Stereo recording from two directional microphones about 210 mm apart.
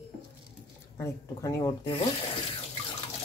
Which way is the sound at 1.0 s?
15° left (ahead or behind).